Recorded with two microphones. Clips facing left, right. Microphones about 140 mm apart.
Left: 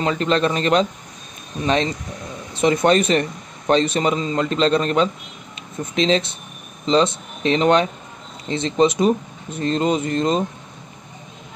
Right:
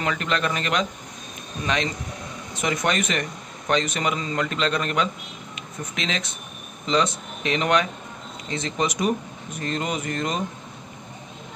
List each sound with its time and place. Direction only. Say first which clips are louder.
0.0 s speech: left 6 dB; 30° left (ahead or behind)
2.5 s speech: left 9 dB; 30° left (ahead or behind)